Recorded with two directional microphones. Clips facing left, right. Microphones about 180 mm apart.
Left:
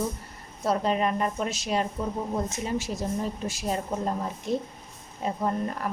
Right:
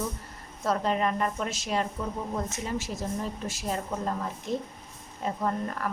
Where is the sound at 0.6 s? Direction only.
15° left (ahead or behind).